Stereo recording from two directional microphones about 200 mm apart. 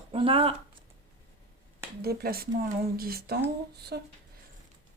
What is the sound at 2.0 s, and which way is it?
Speech, 50° right (ahead or behind).